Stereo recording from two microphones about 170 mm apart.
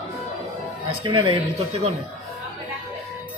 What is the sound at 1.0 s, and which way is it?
Speech, 30° right (ahead or behind).